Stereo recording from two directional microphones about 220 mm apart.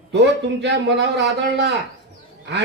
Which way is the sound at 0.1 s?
50° right (ahead or behind).